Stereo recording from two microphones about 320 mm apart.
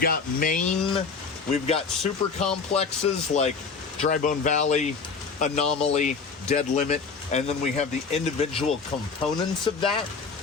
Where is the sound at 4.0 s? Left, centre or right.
Left.